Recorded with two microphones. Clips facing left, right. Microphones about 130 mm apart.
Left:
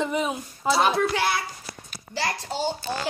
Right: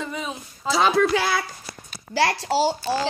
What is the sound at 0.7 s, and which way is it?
Speech, 90° right.